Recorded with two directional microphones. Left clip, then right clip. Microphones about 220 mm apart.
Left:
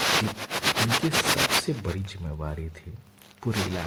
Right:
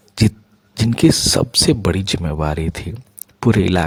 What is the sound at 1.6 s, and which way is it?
Speech, 45° right (ahead or behind).